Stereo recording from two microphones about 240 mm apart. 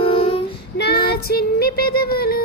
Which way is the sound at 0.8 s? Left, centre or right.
Left.